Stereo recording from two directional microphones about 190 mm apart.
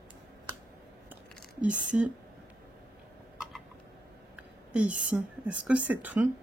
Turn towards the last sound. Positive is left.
turn(degrees=-10)  # may be behind; listen again after turning